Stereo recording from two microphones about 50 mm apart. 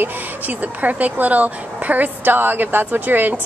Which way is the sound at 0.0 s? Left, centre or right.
Right.